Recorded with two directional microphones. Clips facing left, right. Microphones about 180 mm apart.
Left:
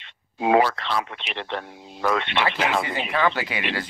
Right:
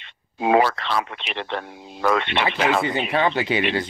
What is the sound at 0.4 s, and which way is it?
Speech, 70° right (ahead or behind).